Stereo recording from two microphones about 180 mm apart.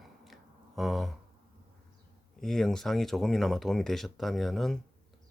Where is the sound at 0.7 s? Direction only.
Centre (ahead or behind).